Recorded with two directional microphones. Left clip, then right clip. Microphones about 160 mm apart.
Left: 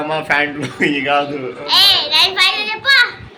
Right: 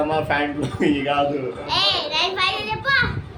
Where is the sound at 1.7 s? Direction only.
25° right (ahead or behind).